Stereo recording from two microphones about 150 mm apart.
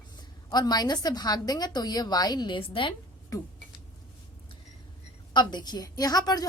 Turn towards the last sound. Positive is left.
turn(degrees=25)  # may be behind; listen again after turning